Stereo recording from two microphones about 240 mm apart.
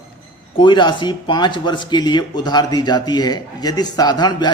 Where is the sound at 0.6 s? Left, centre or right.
Centre.